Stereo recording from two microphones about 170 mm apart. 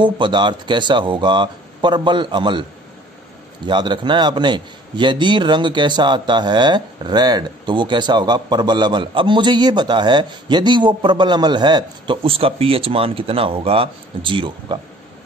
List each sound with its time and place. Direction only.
0.0 s a man's voice: 25° right (ahead or behind)
3.6 s a man's voice: 25° right (ahead or behind)